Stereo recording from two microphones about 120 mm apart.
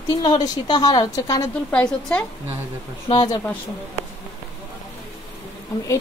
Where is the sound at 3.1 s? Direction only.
35° left (ahead or behind).